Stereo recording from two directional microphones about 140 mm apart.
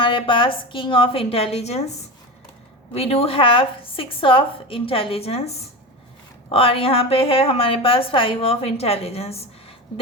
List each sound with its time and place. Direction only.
0.0 s a woman's voice: 35° left (ahead or behind)
2.9 s a woman's voice: 45° left (ahead or behind)